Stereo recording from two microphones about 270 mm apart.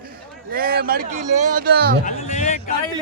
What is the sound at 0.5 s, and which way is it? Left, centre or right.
A man's voice, right.